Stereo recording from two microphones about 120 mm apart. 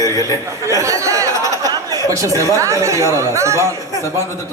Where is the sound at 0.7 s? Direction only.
25° right (ahead or behind).